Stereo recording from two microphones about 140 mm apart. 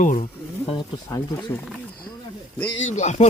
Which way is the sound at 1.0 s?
20° left (ahead or behind).